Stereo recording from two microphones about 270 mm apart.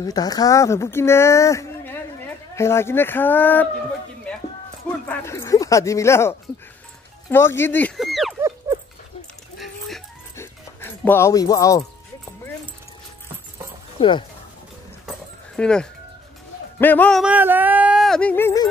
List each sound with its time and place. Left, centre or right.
0.0 s speech: centre
5.0 s speech: centre
8.4 s dog: centre
9.6 s dog: centre
13.9 s speech: centre
15.0 s dog: centre
16.8 s speech: centre